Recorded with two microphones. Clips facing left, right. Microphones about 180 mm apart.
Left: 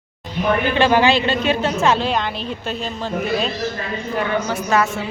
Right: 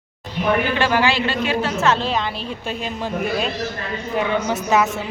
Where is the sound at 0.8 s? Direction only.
20° left (ahead or behind).